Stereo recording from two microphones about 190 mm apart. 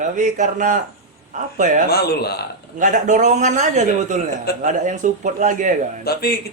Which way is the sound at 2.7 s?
45° right (ahead or behind).